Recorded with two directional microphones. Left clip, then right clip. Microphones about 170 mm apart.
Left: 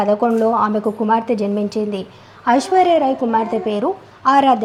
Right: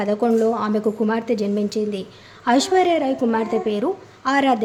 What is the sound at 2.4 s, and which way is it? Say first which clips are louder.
A woman's voice: left 3 dB; 15° right (ahead or behind).